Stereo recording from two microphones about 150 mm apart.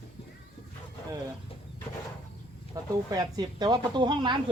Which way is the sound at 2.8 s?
20° right (ahead or behind).